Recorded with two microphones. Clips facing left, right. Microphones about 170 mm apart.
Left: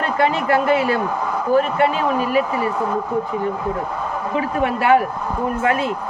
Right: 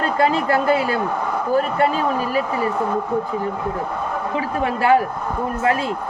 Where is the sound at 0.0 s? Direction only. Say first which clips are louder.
Right 1 dB; 35° right (ahead or behind).